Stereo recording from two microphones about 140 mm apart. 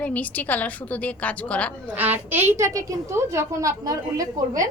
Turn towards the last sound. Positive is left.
turn(degrees=-25)  # may be behind; listen again after turning